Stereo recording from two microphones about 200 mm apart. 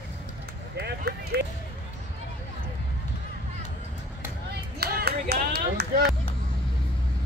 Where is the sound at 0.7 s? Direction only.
55° right (ahead or behind).